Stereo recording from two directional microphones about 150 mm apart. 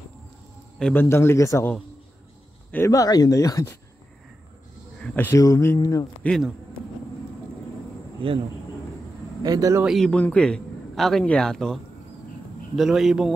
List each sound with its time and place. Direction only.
0.7 s a man's voice: 5° left (ahead or behind)
1.0 s a man's voice: 15° left (ahead or behind)
2.7 s speech: 20° left (ahead or behind)
5.0 s speech: 10° left (ahead or behind)
6.2 s a man's voice: 5° left (ahead or behind)
9.4 s speech: 25° right (ahead or behind)
9.8 s a man's voice: 5° left (ahead or behind)